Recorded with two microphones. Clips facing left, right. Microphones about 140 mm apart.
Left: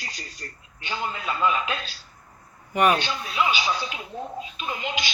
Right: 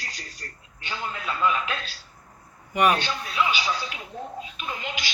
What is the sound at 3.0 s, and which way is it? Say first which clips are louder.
Speech: left 1 dB; 20° left (ahead or behind).